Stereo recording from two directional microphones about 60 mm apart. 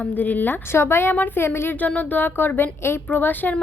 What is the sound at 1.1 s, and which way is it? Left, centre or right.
Speech, left.